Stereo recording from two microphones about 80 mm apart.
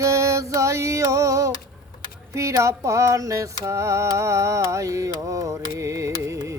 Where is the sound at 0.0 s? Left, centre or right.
Right.